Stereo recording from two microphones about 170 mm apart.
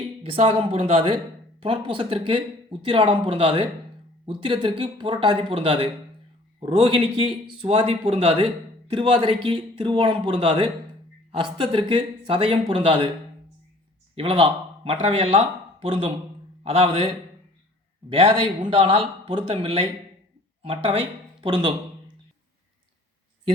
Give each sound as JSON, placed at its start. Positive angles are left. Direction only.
{"t": 0.2, "sound": "a man's voice", "side_deg": -35}
{"t": 14.2, "sound": "speech", "side_deg": -30}